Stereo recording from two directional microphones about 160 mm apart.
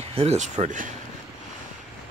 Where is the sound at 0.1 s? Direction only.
40° right (ahead or behind).